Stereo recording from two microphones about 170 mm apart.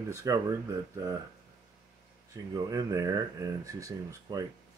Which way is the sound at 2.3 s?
20° right (ahead or behind).